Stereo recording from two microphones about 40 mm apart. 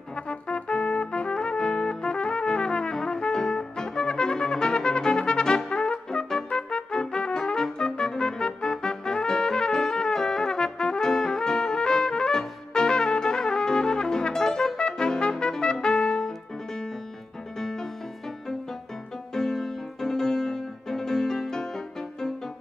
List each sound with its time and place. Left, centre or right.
0.1 s trumpet: left
3.3 s music: centre
6.0 s trumpet: centre
17.6 s music: centre
19.3 s music: centre